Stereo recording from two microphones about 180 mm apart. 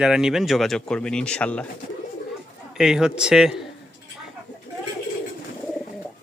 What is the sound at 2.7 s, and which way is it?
Speech, 5° right (ahead or behind).